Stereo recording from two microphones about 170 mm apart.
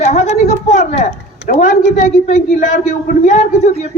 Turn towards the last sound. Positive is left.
turn(degrees=45)  # may be behind; listen again after turning